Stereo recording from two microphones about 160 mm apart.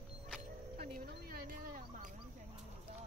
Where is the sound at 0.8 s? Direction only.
65° right (ahead or behind).